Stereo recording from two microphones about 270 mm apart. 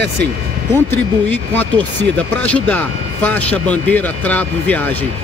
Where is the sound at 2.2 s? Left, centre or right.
Centre.